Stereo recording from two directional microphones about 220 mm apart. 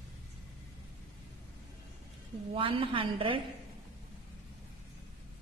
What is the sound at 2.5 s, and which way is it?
Speech, 25° right (ahead or behind).